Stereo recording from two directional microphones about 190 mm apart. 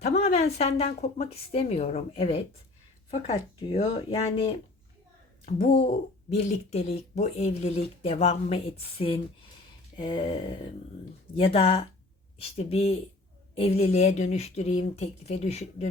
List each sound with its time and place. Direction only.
0.2 s speech: 35° left (ahead or behind)
5.5 s speech: 40° left (ahead or behind)